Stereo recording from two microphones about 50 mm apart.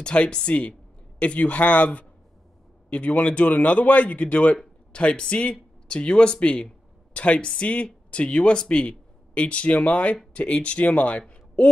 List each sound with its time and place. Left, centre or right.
0.0 s speech: left